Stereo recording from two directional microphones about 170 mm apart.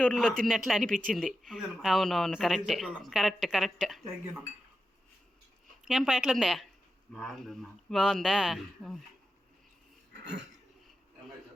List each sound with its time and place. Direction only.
0.0 s speech: 5° left (ahead or behind)
5.8 s speech: 5° right (ahead or behind)
10.1 s a sound: 90° right